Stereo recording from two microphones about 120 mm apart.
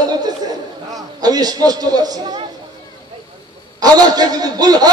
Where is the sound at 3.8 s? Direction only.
35° right (ahead or behind).